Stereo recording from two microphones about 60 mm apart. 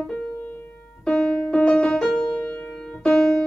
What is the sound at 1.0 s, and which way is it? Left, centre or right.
Music, centre.